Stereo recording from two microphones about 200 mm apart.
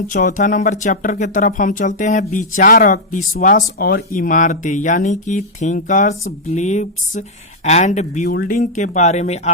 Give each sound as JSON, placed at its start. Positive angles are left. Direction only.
{"t": 0.1, "sound": "speech", "side_deg": 40}